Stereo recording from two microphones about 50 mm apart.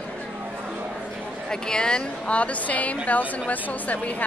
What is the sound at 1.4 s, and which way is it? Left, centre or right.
Speech, centre.